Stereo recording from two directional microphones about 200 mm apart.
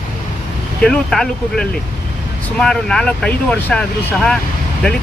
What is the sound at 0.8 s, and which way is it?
Speech, 5° left (ahead or behind).